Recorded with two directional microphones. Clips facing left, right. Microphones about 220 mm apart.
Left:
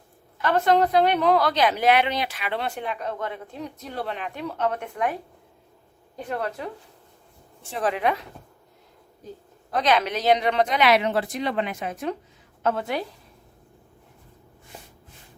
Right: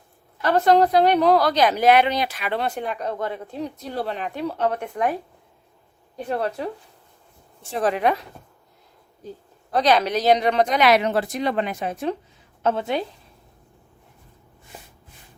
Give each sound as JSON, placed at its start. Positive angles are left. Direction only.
{"t": 0.5, "sound": "a woman's voice", "side_deg": -35}
{"t": 6.2, "sound": "a woman's voice", "side_deg": -35}
{"t": 7.7, "sound": "a woman's voice", "side_deg": -40}
{"t": 9.7, "sound": "a woman's voice", "side_deg": -35}